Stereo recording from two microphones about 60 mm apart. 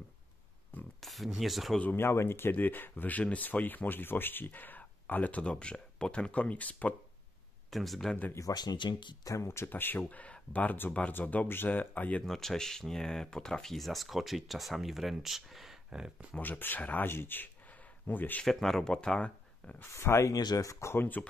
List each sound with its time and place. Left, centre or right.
0.7 s a sound: left
1.0 s speech: centre
2.0 s speech: left
7.7 s speech: centre
8.5 s speech: left
9.4 s speech: left
9.7 s speech: left
10.0 s speech: left
12.3 s speech: centre
16.3 s speech: left
18.4 s speech: centre
19.9 s speech: left
20.2 s speech: left
20.8 s speech: left